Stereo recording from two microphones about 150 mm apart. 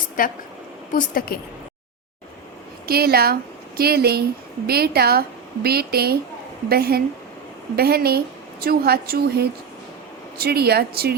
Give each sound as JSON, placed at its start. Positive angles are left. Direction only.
{"t": 0.2, "sound": "a woman's voice", "side_deg": 65}
{"t": 2.8, "sound": "a woman's voice", "side_deg": -90}